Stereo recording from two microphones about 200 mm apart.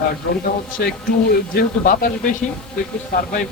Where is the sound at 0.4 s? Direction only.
50° left (ahead or behind).